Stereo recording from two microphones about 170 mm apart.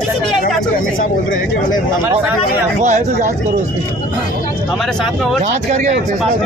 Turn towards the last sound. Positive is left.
turn(degrees=-45)  # may be behind; listen again after turning